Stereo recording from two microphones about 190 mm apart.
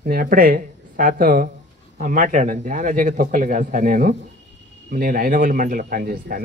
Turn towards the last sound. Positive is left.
turn(degrees=-50)  # may be behind; listen again after turning